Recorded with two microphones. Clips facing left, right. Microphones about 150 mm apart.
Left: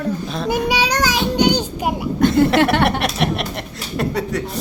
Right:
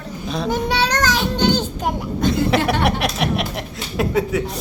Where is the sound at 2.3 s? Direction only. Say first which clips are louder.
Left 3 dB; centre (ahead or behind).